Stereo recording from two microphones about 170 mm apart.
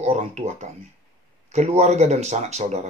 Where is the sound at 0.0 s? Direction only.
40° right (ahead or behind).